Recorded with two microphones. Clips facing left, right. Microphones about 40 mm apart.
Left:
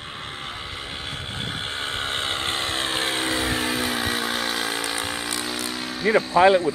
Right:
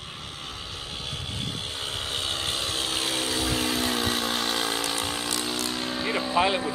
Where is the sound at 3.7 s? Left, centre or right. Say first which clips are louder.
Left 2 dB; centre.